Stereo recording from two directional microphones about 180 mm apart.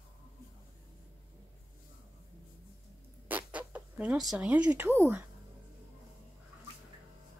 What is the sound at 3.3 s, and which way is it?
Zipper, 10° right (ahead or behind).